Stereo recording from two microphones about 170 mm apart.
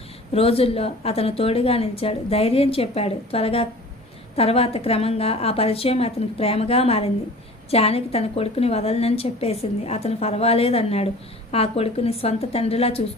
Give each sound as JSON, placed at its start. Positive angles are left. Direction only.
{"t": 0.3, "sound": "a woman's voice", "side_deg": 35}